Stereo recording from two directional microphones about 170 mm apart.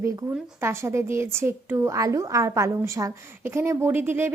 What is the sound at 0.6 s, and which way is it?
A woman's voice, 15° right (ahead or behind).